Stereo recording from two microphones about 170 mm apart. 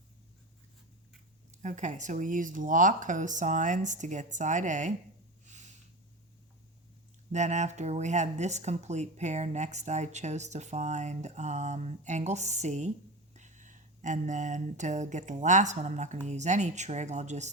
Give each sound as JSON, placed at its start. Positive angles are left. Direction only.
{"t": 1.6, "sound": "speech", "side_deg": -45}
{"t": 5.5, "sound": "a sound", "side_deg": -45}
{"t": 7.3, "sound": "speech", "side_deg": -45}